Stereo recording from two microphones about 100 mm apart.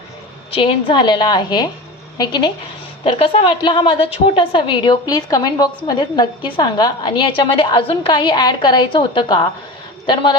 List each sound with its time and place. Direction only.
0.5 s a woman's voice: 65° left (ahead or behind); by 2.5 s 45° left (ahead or behind)
3.0 s a woman's voice: 60° left (ahead or behind)
5.0 s a woman's voice: 40° left (ahead or behind)